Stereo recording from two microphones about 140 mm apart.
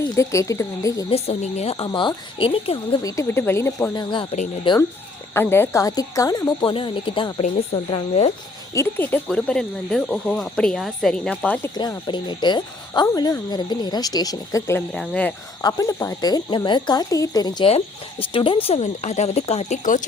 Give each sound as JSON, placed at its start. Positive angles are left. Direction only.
{"t": 0.2, "sound": "speech", "side_deg": 20}
{"t": 1.1, "sound": "speech", "side_deg": 50}
{"t": 1.7, "sound": "speech", "side_deg": 35}
{"t": 3.0, "sound": "speech", "side_deg": 25}
{"t": 3.9, "sound": "speech", "side_deg": 35}
{"t": 5.3, "sound": "speech", "side_deg": 15}
{"t": 8.7, "sound": "speech", "side_deg": 15}
{"t": 11.7, "sound": "speech", "side_deg": 30}
{"t": 14.9, "sound": "speech", "side_deg": 5}
{"t": 15.6, "sound": "speech", "side_deg": 25}
{"t": 17.7, "sound": "speech", "side_deg": 40}